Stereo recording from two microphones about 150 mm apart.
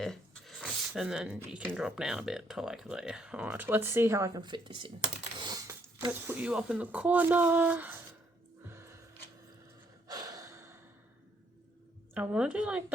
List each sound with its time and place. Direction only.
0.0 s a sound: centre (ahead or behind)
1.6 s speech: 5° right (ahead or behind)
4.4 s speech: 30° right (ahead or behind)
5.4 s a sound: 25° right (ahead or behind)
6.1 s speech: 10° right (ahead or behind)
8.6 s music: 15° right (ahead or behind)
10.1 s gasp: 25° right (ahead or behind)
12.1 s speech: 5° right (ahead or behind)